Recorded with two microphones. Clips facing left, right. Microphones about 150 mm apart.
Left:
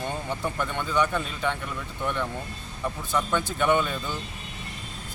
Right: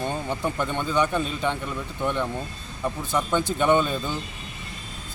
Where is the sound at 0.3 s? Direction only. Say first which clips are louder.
Right 3 dB; 20° right (ahead or behind).